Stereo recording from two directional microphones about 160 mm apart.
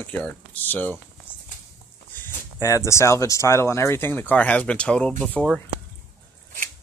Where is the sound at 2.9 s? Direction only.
20° left (ahead or behind).